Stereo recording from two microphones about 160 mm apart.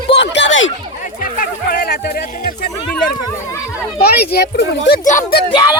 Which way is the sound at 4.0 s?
80° left.